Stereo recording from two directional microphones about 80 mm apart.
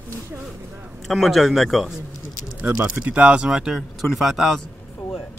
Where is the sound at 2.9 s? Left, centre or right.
Centre.